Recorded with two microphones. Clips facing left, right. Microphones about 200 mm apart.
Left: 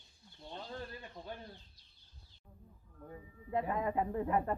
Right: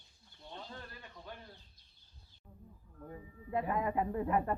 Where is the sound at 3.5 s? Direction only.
25° left (ahead or behind).